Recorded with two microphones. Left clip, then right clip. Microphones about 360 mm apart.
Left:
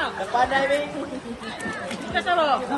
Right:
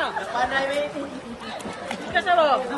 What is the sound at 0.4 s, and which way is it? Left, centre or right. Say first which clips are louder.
Speech: left 3 dB; centre.